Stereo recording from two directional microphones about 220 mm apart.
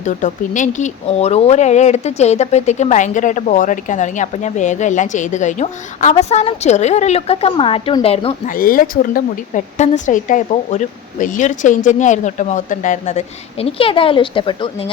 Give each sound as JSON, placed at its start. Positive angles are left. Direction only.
{"t": 0.0, "sound": "speech", "side_deg": 35}
{"t": 8.4, "sound": "speech", "side_deg": 40}